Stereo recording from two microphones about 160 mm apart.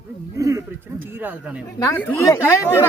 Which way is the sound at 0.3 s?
20° right (ahead or behind).